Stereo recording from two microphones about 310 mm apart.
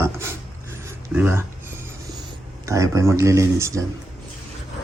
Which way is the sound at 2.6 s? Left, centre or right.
Centre.